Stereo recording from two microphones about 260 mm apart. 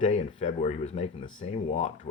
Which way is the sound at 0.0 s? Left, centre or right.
Left.